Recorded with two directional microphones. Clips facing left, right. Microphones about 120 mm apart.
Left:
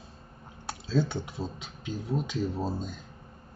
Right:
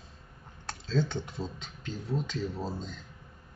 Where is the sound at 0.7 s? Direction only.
10° left (ahead or behind).